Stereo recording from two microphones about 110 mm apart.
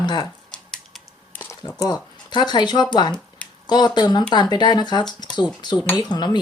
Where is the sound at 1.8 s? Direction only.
40° left (ahead or behind).